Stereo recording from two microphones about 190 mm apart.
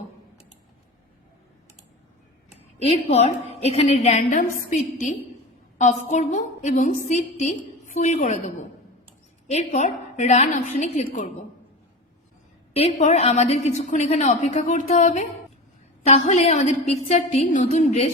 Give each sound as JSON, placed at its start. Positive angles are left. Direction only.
{"t": 2.5, "sound": "a woman's voice", "side_deg": 35}
{"t": 12.7, "sound": "a woman's voice", "side_deg": 35}